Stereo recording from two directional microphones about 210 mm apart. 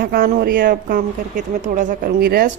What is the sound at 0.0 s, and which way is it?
A woman's voice, 45° right (ahead or behind).